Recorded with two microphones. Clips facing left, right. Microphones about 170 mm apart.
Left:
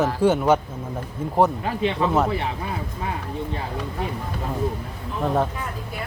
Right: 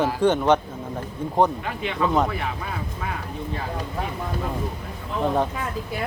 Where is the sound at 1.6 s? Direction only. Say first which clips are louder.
Left 3 dB; 30° left (ahead or behind).